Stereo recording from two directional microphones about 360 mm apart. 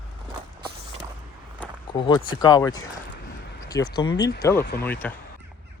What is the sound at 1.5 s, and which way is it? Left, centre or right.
Speech, centre.